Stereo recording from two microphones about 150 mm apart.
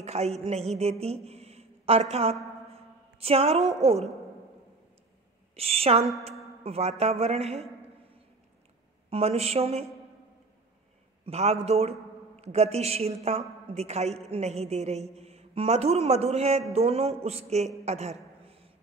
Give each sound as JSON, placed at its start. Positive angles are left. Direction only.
{"t": 0.0, "sound": "a woman's voice", "side_deg": -45}
{"t": 5.6, "sound": "a woman's voice", "side_deg": -40}
{"t": 9.1, "sound": "a woman's voice", "side_deg": -45}
{"t": 11.2, "sound": "a woman's voice", "side_deg": -45}
{"t": 17.8, "sound": "a sound", "side_deg": -45}